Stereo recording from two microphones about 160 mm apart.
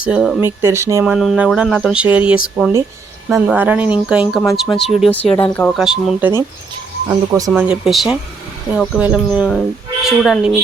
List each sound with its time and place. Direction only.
0.0 s speech: 5° right (ahead or behind)
0.3 s speech: 15° right (ahead or behind)
1.1 s speech: 5° right (ahead or behind)
3.4 s speech: 10° right (ahead or behind)
5.3 s speech: 10° left (ahead or behind)
5.7 s speech: centre (ahead or behind)
7.1 s speech: 20° right (ahead or behind)
7.5 s speech: 5° right (ahead or behind)